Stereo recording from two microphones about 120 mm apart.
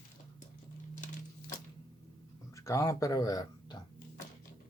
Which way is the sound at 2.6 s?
25° left (ahead or behind).